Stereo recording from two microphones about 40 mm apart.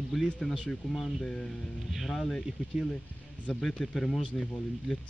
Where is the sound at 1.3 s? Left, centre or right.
Centre.